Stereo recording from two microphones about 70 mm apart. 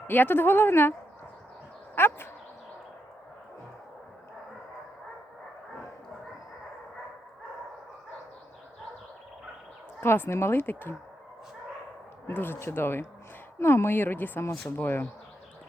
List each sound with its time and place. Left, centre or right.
0.1 s speech: left
2.0 s speech: left
10.0 s speech: left
12.3 s speech: left